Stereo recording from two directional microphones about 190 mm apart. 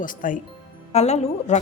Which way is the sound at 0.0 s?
45° left (ahead or behind).